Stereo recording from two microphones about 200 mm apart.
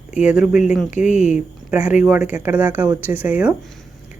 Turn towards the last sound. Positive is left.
turn(degrees=-10)  # may be behind; listen again after turning